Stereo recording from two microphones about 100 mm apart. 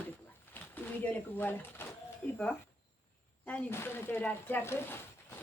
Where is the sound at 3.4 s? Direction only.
20° left (ahead or behind).